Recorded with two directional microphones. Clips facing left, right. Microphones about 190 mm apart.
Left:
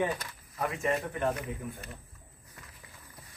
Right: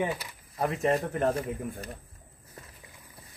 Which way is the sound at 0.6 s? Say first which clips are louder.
Right 4 dB; 35° right (ahead or behind).